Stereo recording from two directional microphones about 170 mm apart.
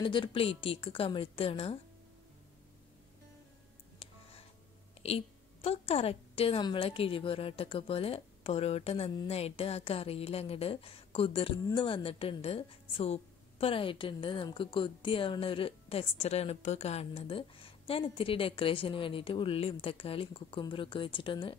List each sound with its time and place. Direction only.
0.0 s a woman's voice: 30° left (ahead or behind)
4.0 s music: 35° left (ahead or behind)
5.0 s a woman's voice: 35° left (ahead or behind)